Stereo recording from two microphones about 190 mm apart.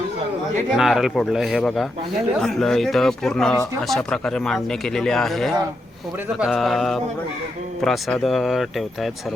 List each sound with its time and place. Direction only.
0.7 s speech: centre (ahead or behind)